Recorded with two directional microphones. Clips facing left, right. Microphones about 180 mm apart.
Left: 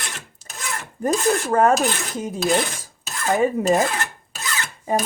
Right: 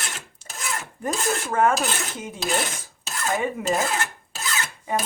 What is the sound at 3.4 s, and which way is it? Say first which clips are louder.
Filing: left 11 dB; 40° left (ahead or behind).